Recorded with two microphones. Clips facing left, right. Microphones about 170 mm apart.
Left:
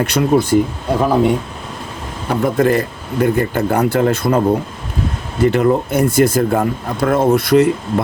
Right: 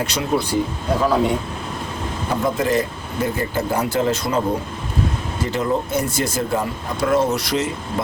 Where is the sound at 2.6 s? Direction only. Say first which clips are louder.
Left 5 dB; 55° left (ahead or behind).